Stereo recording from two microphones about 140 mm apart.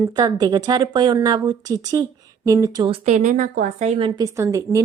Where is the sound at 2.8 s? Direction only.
45° right (ahead or behind); by 3.9 s 60° right (ahead or behind).